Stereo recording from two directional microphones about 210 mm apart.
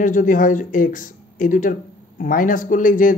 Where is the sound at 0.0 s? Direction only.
40° left (ahead or behind).